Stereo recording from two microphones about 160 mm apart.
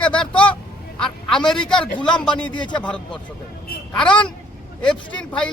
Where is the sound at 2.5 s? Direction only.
30° left (ahead or behind).